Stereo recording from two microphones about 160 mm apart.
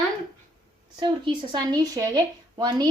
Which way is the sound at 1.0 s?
25° right (ahead or behind).